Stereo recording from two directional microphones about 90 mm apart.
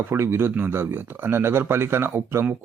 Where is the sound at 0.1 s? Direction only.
25° right (ahead or behind).